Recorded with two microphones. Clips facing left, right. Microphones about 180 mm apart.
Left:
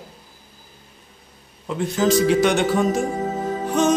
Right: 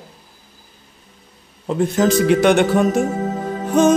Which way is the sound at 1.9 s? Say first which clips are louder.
Right 1 dB; 60° right (ahead or behind).